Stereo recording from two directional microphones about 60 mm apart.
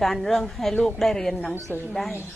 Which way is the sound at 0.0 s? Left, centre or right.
Centre.